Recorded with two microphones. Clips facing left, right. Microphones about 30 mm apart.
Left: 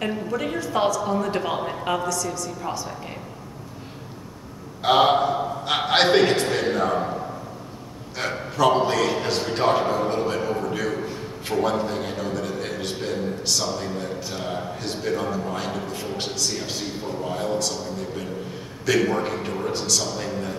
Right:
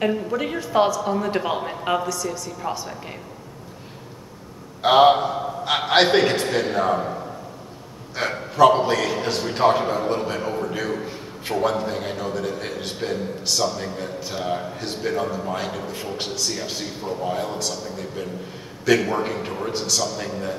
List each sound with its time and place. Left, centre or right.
0.0 s a woman's voice: centre
4.8 s a woman's voice: centre
8.2 s a man's voice: centre